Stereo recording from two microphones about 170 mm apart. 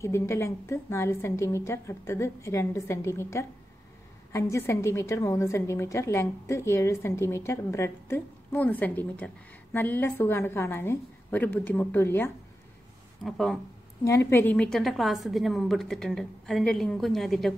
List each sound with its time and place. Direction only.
0.0 s a woman's voice: 15° left (ahead or behind)
13.2 s a woman's voice: centre (ahead or behind)
14.0 s a woman's voice: 15° left (ahead or behind)